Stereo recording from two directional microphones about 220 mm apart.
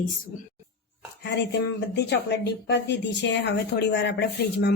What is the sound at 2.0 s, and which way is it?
A woman's voice, 50° left (ahead or behind).